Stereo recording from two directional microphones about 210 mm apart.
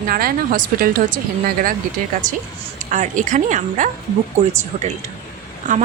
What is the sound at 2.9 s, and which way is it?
Speech, 35° right (ahead or behind).